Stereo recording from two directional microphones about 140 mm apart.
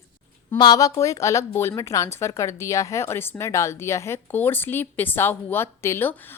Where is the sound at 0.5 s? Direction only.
30° left (ahead or behind).